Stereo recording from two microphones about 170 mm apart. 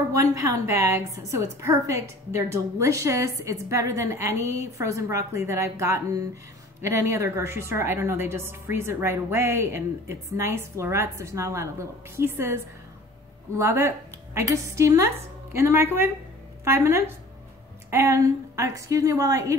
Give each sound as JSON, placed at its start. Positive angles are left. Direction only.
{"t": 0.1, "sound": "a woman's voice", "side_deg": -20}
{"t": 13.6, "sound": "a woman's voice", "side_deg": -15}